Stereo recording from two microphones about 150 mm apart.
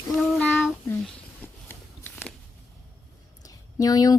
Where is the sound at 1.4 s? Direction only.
15° left (ahead or behind).